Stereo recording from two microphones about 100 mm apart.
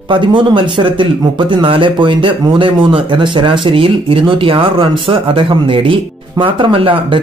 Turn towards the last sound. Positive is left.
turn(degrees=-60)  # may be behind; listen again after turning